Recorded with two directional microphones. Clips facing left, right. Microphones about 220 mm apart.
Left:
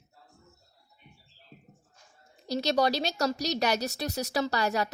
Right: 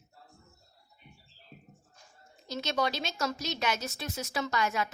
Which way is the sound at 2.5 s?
35° left (ahead or behind).